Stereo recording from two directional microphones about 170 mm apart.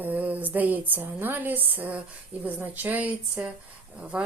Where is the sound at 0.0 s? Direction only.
10° right (ahead or behind).